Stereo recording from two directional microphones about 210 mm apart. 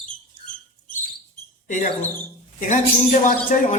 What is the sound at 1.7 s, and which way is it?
Speech, 35° left (ahead or behind).